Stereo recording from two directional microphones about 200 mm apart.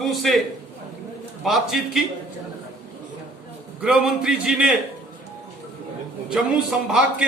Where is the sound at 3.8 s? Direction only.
Centre (ahead or behind).